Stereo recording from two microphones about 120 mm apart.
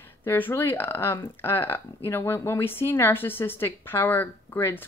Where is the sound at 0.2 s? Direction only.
15° left (ahead or behind).